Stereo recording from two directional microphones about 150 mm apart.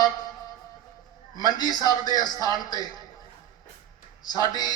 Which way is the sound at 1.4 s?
25° left (ahead or behind).